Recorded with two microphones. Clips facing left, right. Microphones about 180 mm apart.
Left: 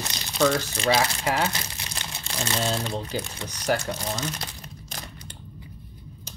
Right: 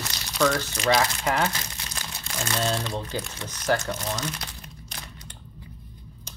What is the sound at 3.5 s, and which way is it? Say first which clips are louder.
Speech: right 1 dB; 15° left (ahead or behind).